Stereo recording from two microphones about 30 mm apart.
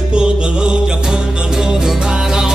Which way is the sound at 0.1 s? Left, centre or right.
Right.